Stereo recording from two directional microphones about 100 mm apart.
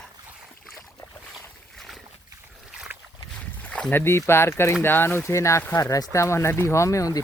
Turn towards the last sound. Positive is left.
turn(degrees=35)  # may be behind; listen again after turning